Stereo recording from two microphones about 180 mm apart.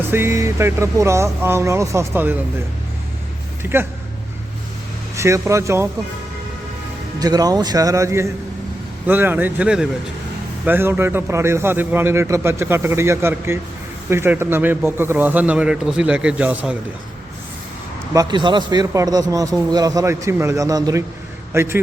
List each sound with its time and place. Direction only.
0.1 s a man's voice: 15° right (ahead or behind)
3.6 s a man's voice: 15° right (ahead or behind)
5.1 s a man's voice: 15° right (ahead or behind)
7.2 s a man's voice: 20° right (ahead or behind)
18.1 s a man's voice: 20° right (ahead or behind)